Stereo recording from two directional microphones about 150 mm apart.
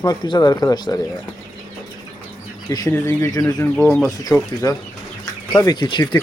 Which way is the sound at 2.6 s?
25° left (ahead or behind).